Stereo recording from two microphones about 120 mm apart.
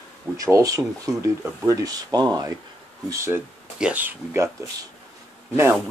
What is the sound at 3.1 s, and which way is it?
Speech, 25° right (ahead or behind).